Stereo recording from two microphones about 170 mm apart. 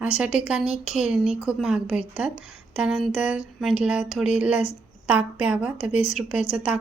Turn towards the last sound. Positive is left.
turn(degrees=-5)  # may be behind; listen again after turning